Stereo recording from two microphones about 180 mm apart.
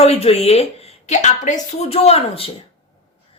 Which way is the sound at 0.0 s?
35° left (ahead or behind).